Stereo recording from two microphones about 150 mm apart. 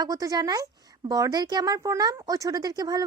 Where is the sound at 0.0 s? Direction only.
25° right (ahead or behind).